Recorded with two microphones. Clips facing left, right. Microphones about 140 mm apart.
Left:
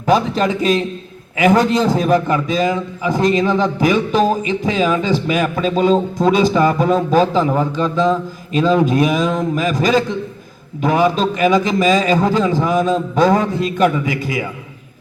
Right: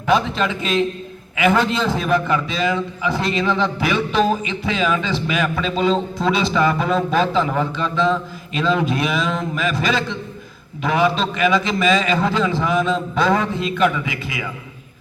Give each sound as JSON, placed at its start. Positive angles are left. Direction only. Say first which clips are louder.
{"t": 0.0, "sound": "a man's voice", "louder": "left 3 dB", "side_deg": 40}